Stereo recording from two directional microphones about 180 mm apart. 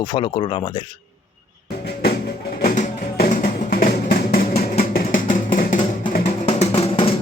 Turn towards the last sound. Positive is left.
turn(degrees=35)  # may be behind; listen again after turning